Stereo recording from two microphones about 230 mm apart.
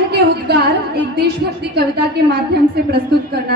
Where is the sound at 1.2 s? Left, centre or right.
Right.